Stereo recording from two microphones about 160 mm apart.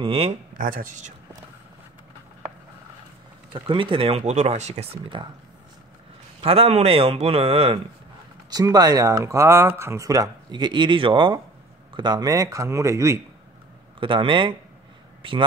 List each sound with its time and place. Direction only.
0.0 s a man's voice: 35° right (ahead or behind)
0.6 s speech: 60° right (ahead or behind)
3.5 s a man's voice: 30° right (ahead or behind)
6.4 s a man's voice: 35° right (ahead or behind)
8.5 s speech: 25° right (ahead or behind)
13.9 s a man's voice: 30° right (ahead or behind)